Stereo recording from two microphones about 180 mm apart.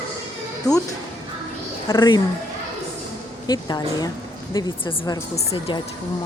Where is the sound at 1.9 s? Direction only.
20° left (ahead or behind).